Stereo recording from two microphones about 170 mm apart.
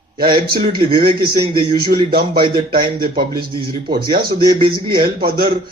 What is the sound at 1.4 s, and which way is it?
Speech, 30° right (ahead or behind).